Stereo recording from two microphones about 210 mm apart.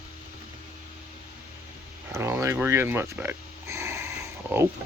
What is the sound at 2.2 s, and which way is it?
Speech, 15° right (ahead or behind).